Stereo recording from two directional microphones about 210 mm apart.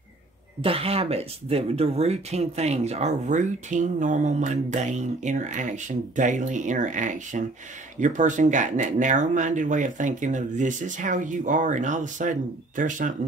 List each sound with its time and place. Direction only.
0.6 s speech: 25° right (ahead or behind)